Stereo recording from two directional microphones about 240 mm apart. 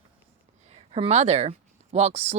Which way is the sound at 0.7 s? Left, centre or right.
Right.